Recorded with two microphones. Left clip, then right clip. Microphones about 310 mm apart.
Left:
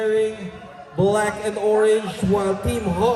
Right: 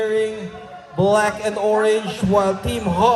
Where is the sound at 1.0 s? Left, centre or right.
Right.